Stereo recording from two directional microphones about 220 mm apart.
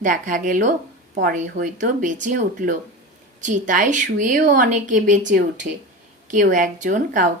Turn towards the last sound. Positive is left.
turn(degrees=-35)  # may be behind; listen again after turning